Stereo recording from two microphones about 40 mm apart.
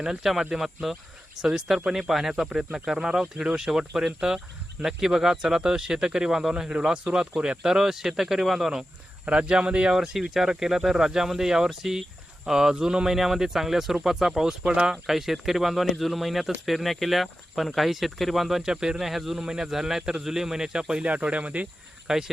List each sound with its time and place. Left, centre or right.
0.0 s speech: centre
9.2 s speech: right; by 18.6 s centre
18.6 s speech: centre
19.4 s speech: centre
21.0 s speech: right
22.0 s speech: centre